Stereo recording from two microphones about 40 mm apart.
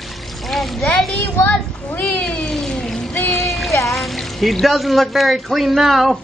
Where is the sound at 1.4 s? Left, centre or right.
Left.